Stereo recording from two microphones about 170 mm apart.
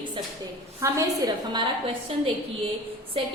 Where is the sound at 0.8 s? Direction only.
20° right (ahead or behind).